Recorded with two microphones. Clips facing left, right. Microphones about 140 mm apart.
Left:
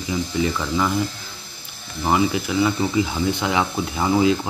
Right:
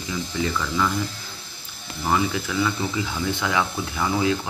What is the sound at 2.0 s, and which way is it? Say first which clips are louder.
Speech: left 3 dB; 15° left (ahead or behind).